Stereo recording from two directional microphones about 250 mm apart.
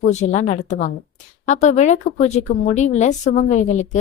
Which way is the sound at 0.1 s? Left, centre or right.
Left.